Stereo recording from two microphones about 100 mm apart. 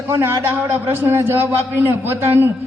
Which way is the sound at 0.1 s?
25° right (ahead or behind).